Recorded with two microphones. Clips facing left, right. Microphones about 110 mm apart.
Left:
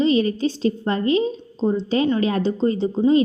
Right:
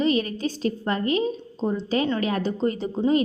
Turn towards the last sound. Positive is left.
turn(degrees=25)  # may be behind; listen again after turning